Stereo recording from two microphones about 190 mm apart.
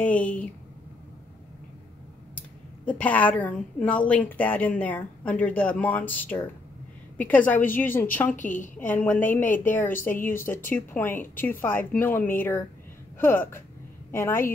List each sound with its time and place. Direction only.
0.0 s a woman's voice: 5° left (ahead or behind)
2.3 s a woman's voice: 10° left (ahead or behind)
8.4 s a woman's voice: 40° left (ahead or behind)
8.7 s a woman's voice: 10° left (ahead or behind)